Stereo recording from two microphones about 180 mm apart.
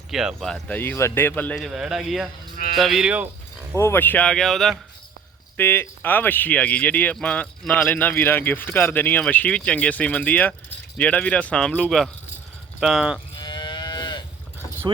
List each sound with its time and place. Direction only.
0.1 s a man's voice: centre (ahead or behind)
3.8 s a man's voice: 15° left (ahead or behind); by 13.1 s 5° right (ahead or behind)
13.4 s livestock: 25° left (ahead or behind)